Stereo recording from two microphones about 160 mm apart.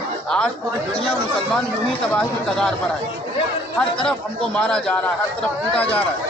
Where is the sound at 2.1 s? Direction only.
5° left (ahead or behind).